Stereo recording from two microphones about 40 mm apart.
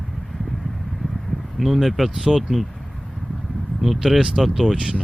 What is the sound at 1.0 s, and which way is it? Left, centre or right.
Speech, centre.